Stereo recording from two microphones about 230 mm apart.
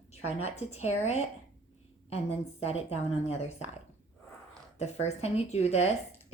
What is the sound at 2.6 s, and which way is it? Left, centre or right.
A woman's voice, left.